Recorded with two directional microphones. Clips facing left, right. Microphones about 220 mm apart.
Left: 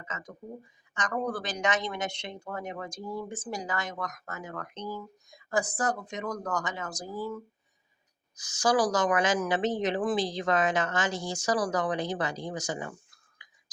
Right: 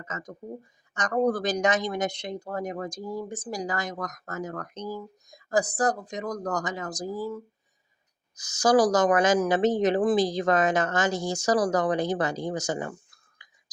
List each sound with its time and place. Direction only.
0.0 s speech: 40° right (ahead or behind)
13.4 s whispering: 45° right (ahead or behind)